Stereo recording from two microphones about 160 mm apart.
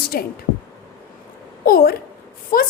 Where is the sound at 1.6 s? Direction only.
65° left (ahead or behind).